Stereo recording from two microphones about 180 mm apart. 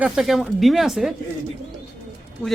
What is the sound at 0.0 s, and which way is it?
A man's voice, centre (ahead or behind).